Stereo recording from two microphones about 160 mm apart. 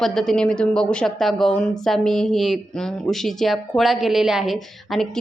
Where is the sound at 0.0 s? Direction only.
5° left (ahead or behind).